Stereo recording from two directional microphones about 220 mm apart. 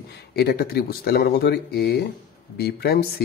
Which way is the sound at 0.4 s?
45° left (ahead or behind).